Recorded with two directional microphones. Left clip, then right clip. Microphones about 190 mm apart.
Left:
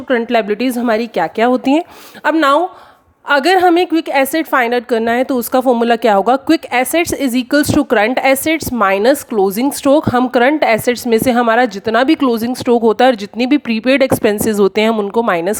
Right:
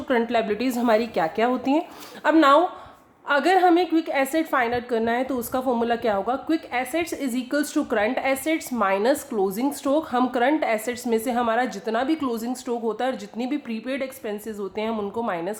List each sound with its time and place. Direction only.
0.1 s a woman's voice: 35° left (ahead or behind); by 15.5 s 55° left (ahead or behind)